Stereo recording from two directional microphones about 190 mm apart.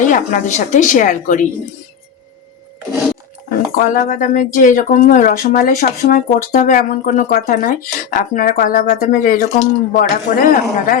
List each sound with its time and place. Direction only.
0.0 s a woman's voice: 40° left (ahead or behind)
3.5 s speech: 45° left (ahead or behind)